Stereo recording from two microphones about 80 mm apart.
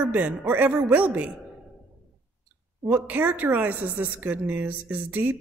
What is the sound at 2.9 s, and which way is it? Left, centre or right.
Speech, right.